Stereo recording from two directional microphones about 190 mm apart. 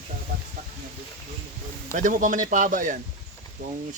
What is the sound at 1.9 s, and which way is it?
Speech, 40° right (ahead or behind).